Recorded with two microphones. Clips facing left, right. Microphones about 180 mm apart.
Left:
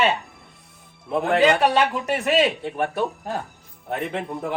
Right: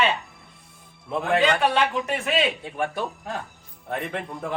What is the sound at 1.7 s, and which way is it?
Speech, 40° left (ahead or behind).